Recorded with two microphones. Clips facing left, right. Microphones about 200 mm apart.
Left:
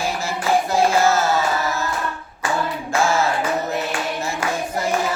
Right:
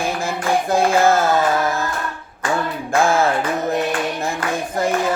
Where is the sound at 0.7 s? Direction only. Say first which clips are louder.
Right 4 dB; 55° right (ahead or behind).